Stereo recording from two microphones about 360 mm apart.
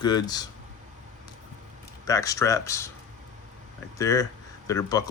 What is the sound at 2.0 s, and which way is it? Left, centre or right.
Speech, centre.